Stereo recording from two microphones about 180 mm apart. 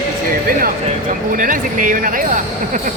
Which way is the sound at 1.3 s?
50° right (ahead or behind).